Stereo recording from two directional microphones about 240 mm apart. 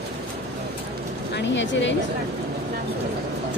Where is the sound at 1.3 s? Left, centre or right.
Left.